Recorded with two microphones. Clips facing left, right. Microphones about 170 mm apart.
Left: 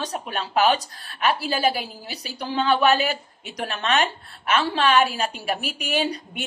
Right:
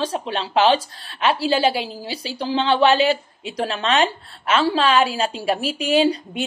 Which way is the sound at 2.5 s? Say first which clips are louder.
Right 3 dB; 25° right (ahead or behind).